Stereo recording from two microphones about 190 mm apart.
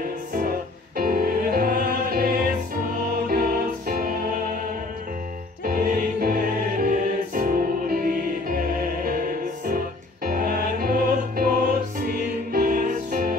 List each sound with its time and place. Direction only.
0.3 s music: 50° right (ahead or behind)
5.7 s music: 50° right (ahead or behind)